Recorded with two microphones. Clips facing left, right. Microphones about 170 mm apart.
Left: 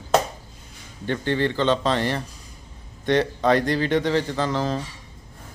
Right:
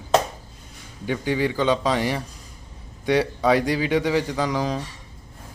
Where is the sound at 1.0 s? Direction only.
10° right (ahead or behind).